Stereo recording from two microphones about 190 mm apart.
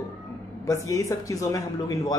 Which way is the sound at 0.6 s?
15° left (ahead or behind).